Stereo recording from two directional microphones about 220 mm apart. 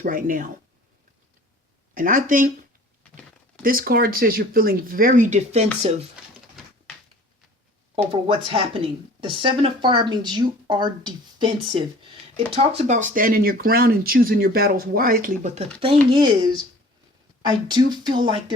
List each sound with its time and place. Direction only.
0.0 s speech: 40° right (ahead or behind)
2.0 s speech: 40° right (ahead or behind)
3.6 s speech: 40° right (ahead or behind)
8.1 s speech: 25° right (ahead or behind)
12.5 s speech: 30° right (ahead or behind)
17.5 s speech: 20° right (ahead or behind)